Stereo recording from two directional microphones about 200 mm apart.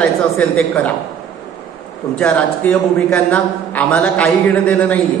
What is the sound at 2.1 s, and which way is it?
A man's voice, 5° left (ahead or behind).